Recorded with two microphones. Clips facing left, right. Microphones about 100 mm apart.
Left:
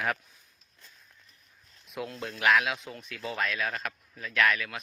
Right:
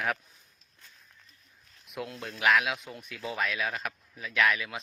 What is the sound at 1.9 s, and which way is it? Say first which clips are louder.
Speech: left 1 dB; centre (ahead or behind).